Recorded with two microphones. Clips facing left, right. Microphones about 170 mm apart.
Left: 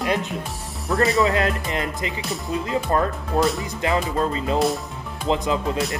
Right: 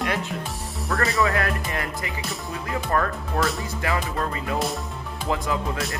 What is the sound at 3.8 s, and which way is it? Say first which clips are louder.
Speech: left 5 dB; 25° left (ahead or behind).